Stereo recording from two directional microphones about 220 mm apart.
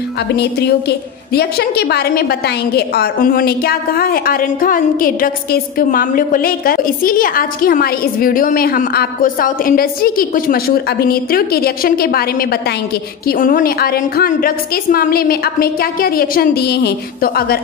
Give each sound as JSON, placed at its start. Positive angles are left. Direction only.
{"t": 0.4, "sound": "a woman's voice", "side_deg": 45}